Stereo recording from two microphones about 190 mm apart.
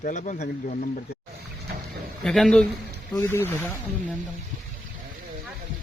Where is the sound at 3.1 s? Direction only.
15° left (ahead or behind).